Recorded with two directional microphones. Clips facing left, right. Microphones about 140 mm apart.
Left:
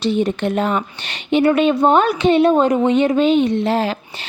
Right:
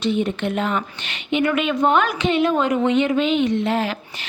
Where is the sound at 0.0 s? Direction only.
35° left (ahead or behind).